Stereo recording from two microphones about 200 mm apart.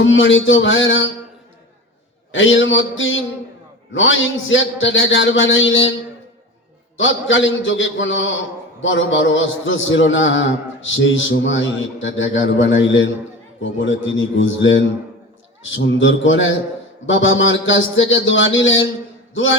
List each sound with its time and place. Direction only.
0.0 s a man's voice: 70° left (ahead or behind)
2.3 s a man's voice: 70° left (ahead or behind)
6.9 s a man's voice: 70° left (ahead or behind)